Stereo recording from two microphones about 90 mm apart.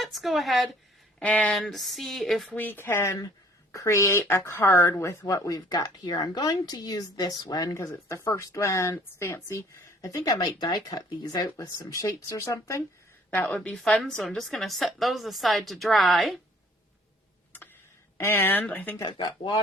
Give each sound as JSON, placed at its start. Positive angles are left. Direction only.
{"t": 0.0, "sound": "a woman's voice", "side_deg": 0}
{"t": 1.2, "sound": "a woman's voice", "side_deg": 15}
{"t": 1.5, "sound": "a woman's voice", "side_deg": 0}
{"t": 2.6, "sound": "speech", "side_deg": 25}
{"t": 13.4, "sound": "a woman's voice", "side_deg": 15}
{"t": 14.0, "sound": "a woman's voice", "side_deg": 5}
{"t": 18.2, "sound": "speech", "side_deg": 25}